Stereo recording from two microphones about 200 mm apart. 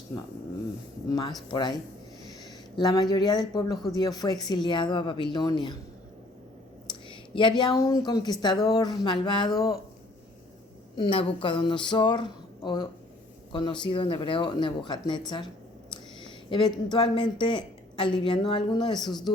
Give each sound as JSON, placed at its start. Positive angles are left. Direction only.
{"t": 1.1, "sound": "speech", "side_deg": 20}
{"t": 6.8, "sound": "speech", "side_deg": 25}
{"t": 10.9, "sound": "speech", "side_deg": 25}
{"t": 16.5, "sound": "speech", "side_deg": 20}